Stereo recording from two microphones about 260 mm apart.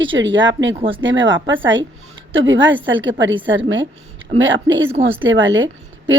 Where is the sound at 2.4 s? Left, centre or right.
Right.